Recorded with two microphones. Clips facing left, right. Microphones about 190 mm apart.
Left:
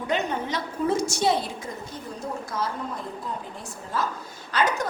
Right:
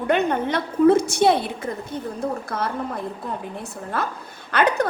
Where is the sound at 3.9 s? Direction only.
60° right (ahead or behind).